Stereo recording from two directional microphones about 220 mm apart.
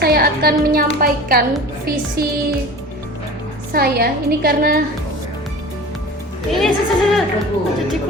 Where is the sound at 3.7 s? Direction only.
45° right (ahead or behind).